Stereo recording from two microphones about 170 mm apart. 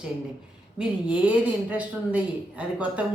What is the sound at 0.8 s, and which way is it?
Speech, 5° right (ahead or behind).